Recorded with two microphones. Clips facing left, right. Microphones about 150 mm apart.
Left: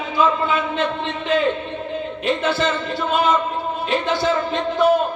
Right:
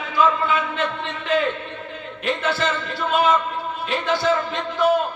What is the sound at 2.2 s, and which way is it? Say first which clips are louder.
Speech: left 2 dB; 5° right (ahead or behind).